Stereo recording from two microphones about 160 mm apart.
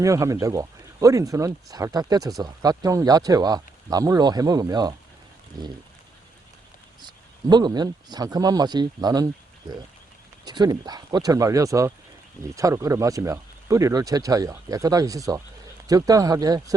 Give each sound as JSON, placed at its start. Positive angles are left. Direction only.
{"t": 0.0, "sound": "speech", "side_deg": -20}
{"t": 7.5, "sound": "speech", "side_deg": -25}